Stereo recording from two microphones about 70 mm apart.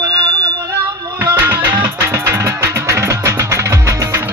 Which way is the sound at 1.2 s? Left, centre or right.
Right.